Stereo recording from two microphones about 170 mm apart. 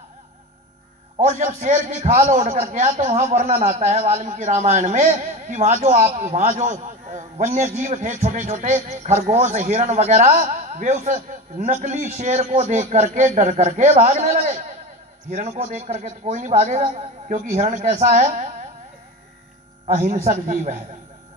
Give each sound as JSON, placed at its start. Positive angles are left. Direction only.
{"t": 1.2, "sound": "a man's voice", "side_deg": -45}
{"t": 19.9, "sound": "a man's voice", "side_deg": -45}